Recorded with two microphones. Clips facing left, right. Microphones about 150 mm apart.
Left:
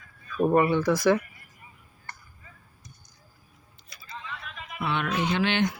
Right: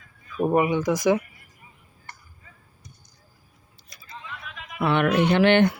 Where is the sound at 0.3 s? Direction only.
15° right (ahead or behind).